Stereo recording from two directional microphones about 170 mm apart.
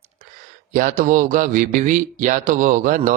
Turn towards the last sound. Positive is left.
turn(degrees=-50)  # may be behind; listen again after turning